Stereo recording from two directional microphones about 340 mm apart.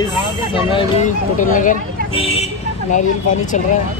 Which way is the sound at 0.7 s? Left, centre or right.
Left.